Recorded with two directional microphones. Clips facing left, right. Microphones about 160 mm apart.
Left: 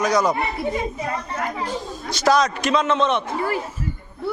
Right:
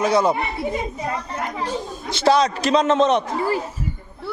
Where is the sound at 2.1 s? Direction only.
30° right (ahead or behind).